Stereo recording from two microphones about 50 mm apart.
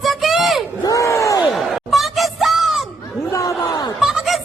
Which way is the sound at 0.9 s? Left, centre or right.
Left.